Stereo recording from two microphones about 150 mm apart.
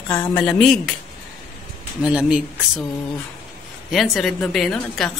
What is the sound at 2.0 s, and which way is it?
Speech, 5° right (ahead or behind).